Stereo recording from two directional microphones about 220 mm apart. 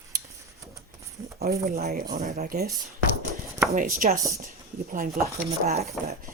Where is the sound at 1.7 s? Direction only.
45° right (ahead or behind).